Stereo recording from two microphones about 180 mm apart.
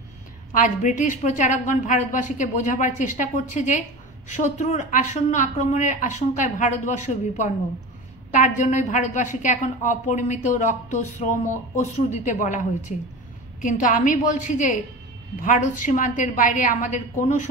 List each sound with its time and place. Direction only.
0.7 s a woman's voice: 45° left (ahead or behind)